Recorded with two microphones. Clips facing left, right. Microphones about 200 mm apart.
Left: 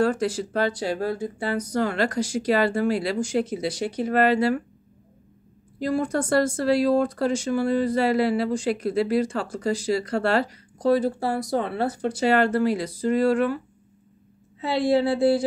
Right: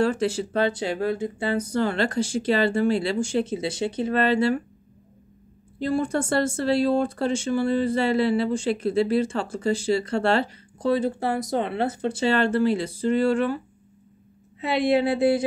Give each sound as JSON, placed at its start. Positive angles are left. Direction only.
{"t": 0.0, "sound": "speech", "side_deg": -25}
{"t": 5.8, "sound": "speech", "side_deg": -25}
{"t": 14.6, "sound": "speech", "side_deg": -20}